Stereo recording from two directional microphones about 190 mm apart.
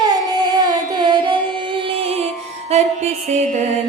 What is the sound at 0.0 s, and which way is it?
Carnatic music, 20° right (ahead or behind).